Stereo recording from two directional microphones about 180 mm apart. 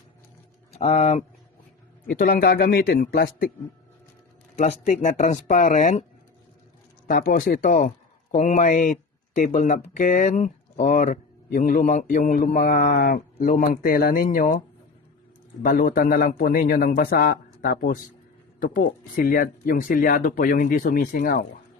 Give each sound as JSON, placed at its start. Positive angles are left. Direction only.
{"t": 0.7, "sound": "speech", "side_deg": 35}
{"t": 2.0, "sound": "speech", "side_deg": 50}
{"t": 4.5, "sound": "speech", "side_deg": 40}
{"t": 7.1, "sound": "speech", "side_deg": 55}
{"t": 15.6, "sound": "speech", "side_deg": 50}